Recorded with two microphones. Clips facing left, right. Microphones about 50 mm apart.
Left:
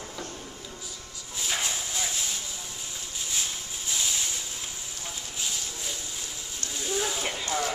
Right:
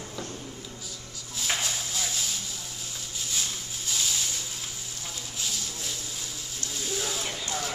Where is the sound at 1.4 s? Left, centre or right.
Centre.